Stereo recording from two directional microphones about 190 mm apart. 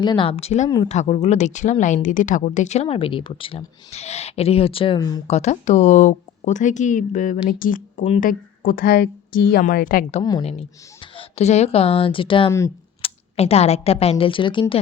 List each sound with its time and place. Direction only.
0.0 s a woman's voice: 25° left (ahead or behind)
4.9 s speech: 20° left (ahead or behind)
5.3 s a woman's voice: 35° left (ahead or behind)
10.4 s speech: 30° left (ahead or behind)
12.5 s speech: 15° left (ahead or behind)
13.0 s a woman's voice: 35° left (ahead or behind)